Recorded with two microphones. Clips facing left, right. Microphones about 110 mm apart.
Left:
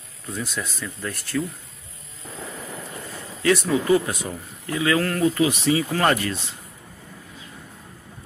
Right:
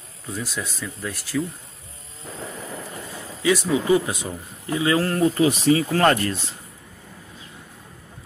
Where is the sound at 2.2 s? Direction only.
35° right (ahead or behind).